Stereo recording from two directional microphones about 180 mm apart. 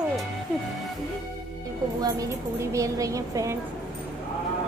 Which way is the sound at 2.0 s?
20° right (ahead or behind).